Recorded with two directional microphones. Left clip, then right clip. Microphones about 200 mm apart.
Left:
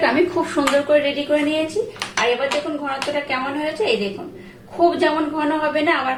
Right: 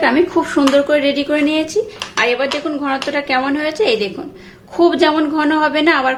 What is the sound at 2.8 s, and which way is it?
Speech, 65° right (ahead or behind).